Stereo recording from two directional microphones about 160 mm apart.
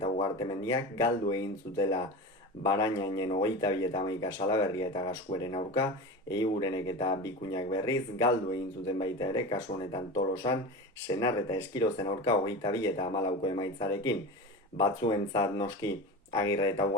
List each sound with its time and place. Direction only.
0.0 s speech: 30° left (ahead or behind)
11.1 s speech: 25° left (ahead or behind)